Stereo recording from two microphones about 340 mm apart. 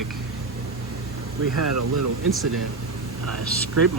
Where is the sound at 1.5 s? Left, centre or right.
Right.